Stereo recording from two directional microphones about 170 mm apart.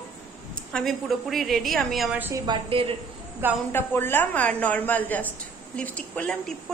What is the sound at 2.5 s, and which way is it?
Speech, 35° right (ahead or behind).